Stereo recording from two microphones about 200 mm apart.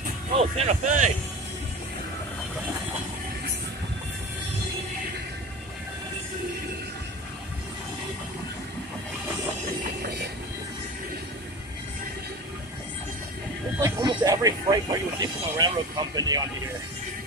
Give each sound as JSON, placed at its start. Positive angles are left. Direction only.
{"t": 0.4, "sound": "speech", "side_deg": -35}
{"t": 13.7, "sound": "music", "side_deg": -15}
{"t": 16.2, "sound": "speech", "side_deg": -20}